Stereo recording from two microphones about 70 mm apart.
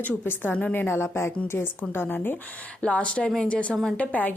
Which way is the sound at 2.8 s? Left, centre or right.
Centre.